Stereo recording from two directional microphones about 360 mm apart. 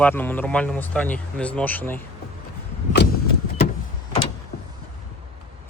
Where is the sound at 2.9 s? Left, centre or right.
Left.